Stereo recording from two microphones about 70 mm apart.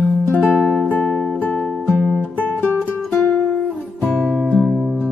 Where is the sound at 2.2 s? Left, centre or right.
Left.